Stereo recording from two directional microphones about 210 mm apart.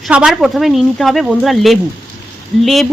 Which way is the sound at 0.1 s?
5° right (ahead or behind).